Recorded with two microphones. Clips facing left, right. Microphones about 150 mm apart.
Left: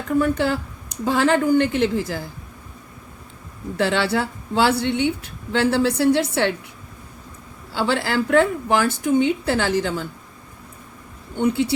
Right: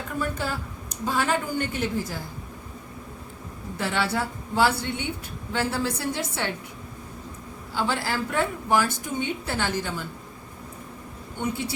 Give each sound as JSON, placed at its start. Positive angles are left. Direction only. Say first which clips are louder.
{"t": 0.2, "sound": "a woman's voice", "louder": "left 9 dB", "side_deg": 80}
{"t": 1.0, "sound": "a woman's voice", "louder": "left 8 dB", "side_deg": 90}
{"t": 3.8, "sound": "a woman's voice", "louder": "left 6 dB", "side_deg": 85}
{"t": 7.7, "sound": "a woman's voice", "louder": "left 5 dB", "side_deg": 80}
{"t": 11.3, "sound": "speech", "louder": "left 9 dB", "side_deg": 70}